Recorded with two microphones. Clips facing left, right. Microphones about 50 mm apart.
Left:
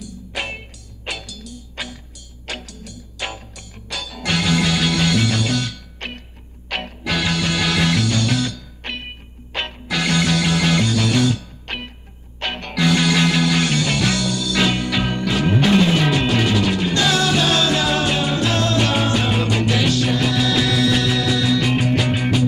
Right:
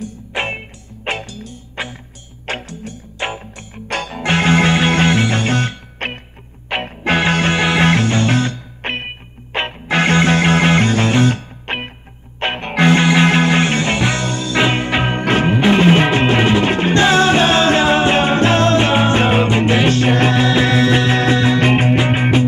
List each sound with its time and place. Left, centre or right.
0.0 s music: right